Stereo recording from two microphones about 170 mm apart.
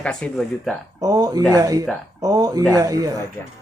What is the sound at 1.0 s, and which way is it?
A man's voice, 20° right (ahead or behind).